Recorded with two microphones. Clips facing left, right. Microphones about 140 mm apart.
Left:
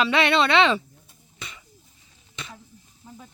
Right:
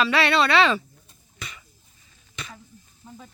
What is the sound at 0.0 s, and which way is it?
Speech, 20° left (ahead or behind).